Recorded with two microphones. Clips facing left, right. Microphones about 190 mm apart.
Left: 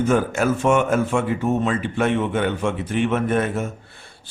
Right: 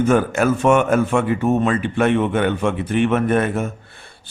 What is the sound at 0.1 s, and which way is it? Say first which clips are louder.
Speech: right 3 dB; 60° right (ahead or behind).